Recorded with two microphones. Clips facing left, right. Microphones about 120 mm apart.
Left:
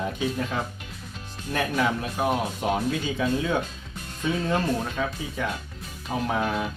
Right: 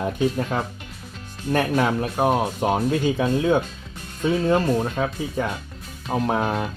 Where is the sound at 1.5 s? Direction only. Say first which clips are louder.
Right 5 dB; 45° right (ahead or behind).